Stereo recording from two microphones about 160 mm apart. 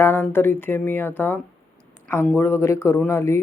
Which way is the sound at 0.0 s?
15° left (ahead or behind).